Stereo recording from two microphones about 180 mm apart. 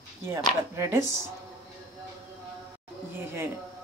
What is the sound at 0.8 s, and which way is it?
Speech, 15° right (ahead or behind).